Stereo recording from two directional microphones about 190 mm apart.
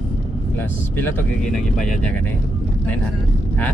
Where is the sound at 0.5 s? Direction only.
10° left (ahead or behind).